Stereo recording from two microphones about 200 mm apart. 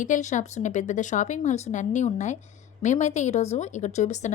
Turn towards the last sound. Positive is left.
turn(degrees=35)  # may be behind; listen again after turning